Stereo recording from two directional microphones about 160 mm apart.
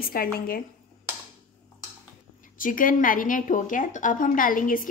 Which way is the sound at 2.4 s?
60° left (ahead or behind).